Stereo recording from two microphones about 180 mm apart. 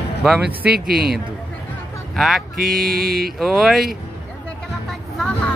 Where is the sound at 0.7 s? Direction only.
60° right (ahead or behind).